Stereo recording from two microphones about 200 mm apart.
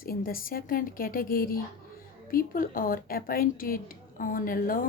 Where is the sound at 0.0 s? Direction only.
45° left (ahead or behind).